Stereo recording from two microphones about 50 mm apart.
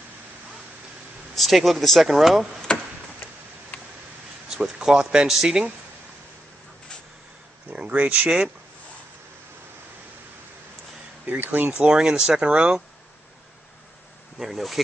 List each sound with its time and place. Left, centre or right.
1.3 s a man's voice: centre
2.7 s a sound: centre
4.5 s speech: centre
7.7 s speech: right
11.2 s speech: right
12.0 s speech: centre
14.4 s a man's voice: centre